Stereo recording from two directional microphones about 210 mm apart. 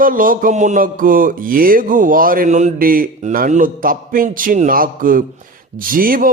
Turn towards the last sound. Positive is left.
turn(degrees=-40)  # may be behind; listen again after turning